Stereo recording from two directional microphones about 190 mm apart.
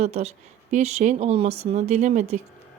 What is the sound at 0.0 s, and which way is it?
Speech, 35° right (ahead or behind).